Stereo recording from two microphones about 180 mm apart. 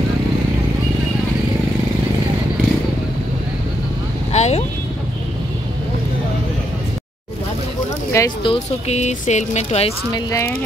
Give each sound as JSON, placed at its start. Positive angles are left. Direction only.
{"t": 4.3, "sound": "vehicle", "side_deg": 40}
{"t": 8.2, "sound": "speech", "side_deg": 15}
{"t": 8.5, "sound": "speech", "side_deg": 35}